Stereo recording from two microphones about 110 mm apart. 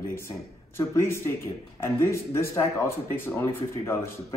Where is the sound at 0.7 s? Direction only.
25° left (ahead or behind).